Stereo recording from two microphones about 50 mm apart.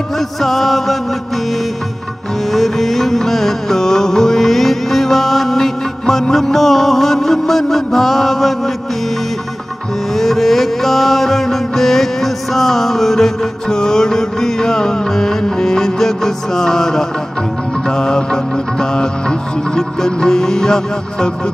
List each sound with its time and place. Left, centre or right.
0.4 s chant: centre
2.5 s music: centre
10.1 s music: centre